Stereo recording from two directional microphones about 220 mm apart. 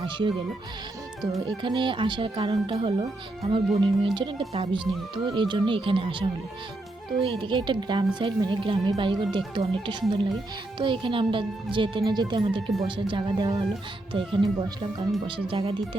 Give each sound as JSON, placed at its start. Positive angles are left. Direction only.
{"t": 0.0, "sound": "speech", "side_deg": -25}